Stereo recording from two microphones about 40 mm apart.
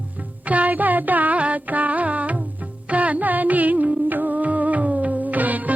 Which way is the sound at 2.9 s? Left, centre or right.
Right.